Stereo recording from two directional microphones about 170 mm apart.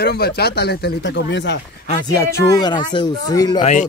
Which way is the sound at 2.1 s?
20° left (ahead or behind).